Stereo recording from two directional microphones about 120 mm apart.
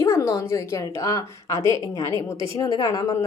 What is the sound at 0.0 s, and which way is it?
A woman's voice, 25° left (ahead or behind).